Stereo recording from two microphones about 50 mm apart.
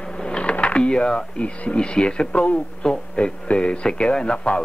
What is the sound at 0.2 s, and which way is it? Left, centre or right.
Speech, centre.